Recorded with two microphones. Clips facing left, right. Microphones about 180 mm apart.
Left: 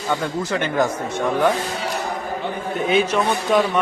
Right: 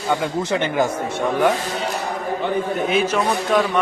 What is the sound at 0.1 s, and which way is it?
Speech, 15° right (ahead or behind).